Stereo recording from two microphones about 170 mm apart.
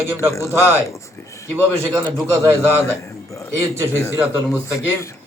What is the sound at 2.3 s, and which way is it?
Speech, 15° right (ahead or behind).